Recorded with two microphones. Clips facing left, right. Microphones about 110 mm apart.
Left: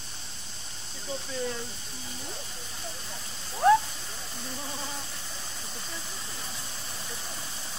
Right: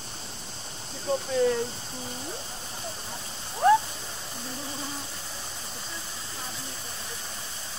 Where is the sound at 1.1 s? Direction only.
55° right (ahead or behind).